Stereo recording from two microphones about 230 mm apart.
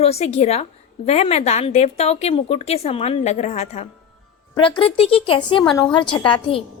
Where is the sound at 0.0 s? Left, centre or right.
Left.